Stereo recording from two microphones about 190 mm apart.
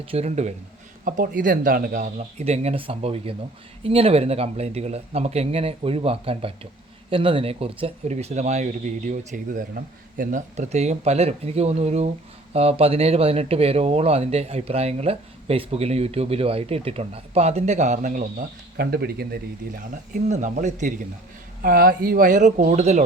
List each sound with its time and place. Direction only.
0.0 s speech: 30° right (ahead or behind)